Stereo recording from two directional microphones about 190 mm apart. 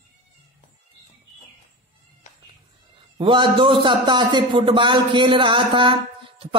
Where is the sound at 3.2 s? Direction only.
25° right (ahead or behind).